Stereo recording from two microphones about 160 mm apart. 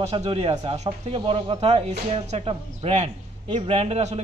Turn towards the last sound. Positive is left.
turn(degrees=-45)  # may be behind; listen again after turning